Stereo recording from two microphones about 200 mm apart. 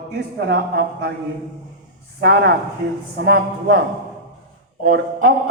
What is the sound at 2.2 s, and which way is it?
Speech, 55° right (ahead or behind).